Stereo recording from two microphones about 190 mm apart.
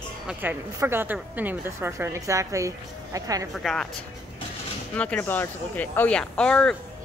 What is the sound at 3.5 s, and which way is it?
Speech, centre (ahead or behind).